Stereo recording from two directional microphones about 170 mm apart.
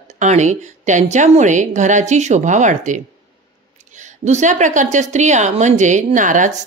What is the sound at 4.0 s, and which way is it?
A woman's voice, 45° right (ahead or behind).